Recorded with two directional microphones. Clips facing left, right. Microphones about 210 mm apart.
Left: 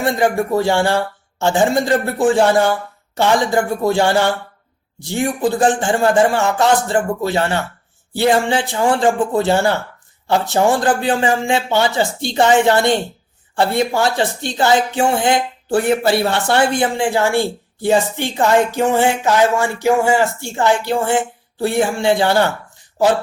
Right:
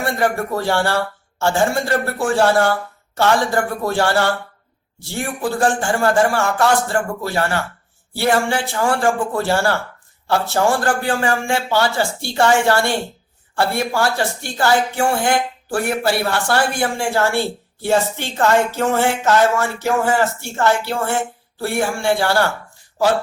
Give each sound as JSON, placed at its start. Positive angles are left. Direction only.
{"t": 0.0, "sound": "speech", "side_deg": 15}